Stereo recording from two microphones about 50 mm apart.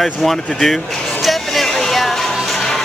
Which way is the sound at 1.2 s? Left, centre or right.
Centre.